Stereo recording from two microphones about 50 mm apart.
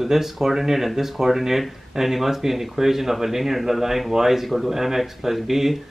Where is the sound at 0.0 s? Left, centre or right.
Centre.